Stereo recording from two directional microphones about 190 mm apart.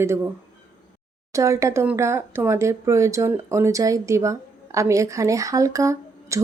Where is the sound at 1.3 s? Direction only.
15° right (ahead or behind).